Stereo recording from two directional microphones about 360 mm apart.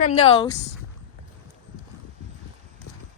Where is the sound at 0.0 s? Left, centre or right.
Left.